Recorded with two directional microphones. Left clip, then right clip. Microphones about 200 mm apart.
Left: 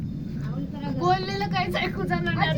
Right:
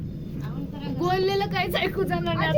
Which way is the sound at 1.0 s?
40° right (ahead or behind).